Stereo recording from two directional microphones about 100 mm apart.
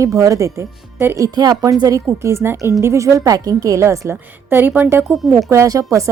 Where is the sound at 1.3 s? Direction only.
40° right (ahead or behind).